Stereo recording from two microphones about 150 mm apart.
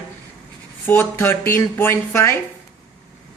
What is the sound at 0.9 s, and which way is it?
Speech, 15° left (ahead or behind).